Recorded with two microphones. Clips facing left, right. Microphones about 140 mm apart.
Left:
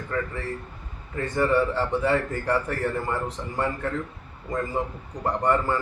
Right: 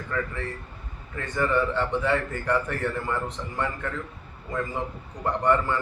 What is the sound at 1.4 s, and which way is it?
A man's voice, 35° left (ahead or behind).